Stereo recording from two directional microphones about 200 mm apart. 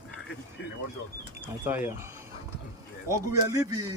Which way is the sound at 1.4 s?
10° right (ahead or behind).